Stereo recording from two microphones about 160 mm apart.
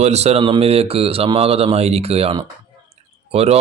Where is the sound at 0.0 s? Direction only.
40° right (ahead or behind).